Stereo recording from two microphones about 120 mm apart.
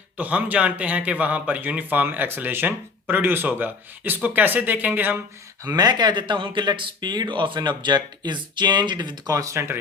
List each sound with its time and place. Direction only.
0.2 s speech: 15° right (ahead or behind)
5.6 s speech: 35° right (ahead or behind)